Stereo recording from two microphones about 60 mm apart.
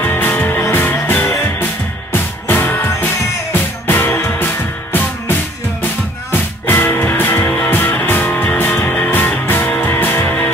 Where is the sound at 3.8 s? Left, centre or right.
Left.